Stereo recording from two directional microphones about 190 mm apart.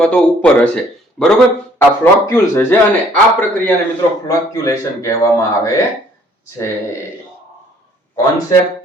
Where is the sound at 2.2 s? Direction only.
15° left (ahead or behind).